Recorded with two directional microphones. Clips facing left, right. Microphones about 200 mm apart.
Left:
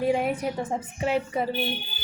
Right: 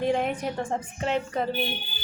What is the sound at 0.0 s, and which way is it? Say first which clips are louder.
Speech: left 1 dB; 5° left (ahead or behind).